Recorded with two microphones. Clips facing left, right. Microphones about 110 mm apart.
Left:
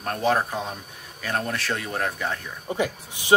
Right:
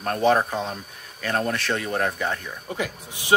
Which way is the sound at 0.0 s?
Centre (ahead or behind).